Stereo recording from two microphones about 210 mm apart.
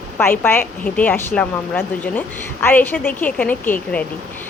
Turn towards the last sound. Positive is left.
turn(degrees=5)  # may be behind; listen again after turning